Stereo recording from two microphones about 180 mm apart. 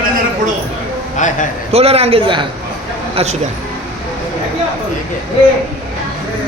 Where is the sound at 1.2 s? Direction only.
45° left (ahead or behind).